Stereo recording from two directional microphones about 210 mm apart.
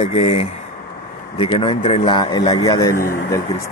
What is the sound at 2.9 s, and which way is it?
Speech, 45° left (ahead or behind).